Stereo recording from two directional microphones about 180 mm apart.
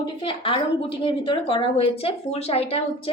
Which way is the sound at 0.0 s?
30° left (ahead or behind).